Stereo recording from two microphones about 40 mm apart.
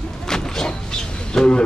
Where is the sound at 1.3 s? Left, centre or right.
Centre.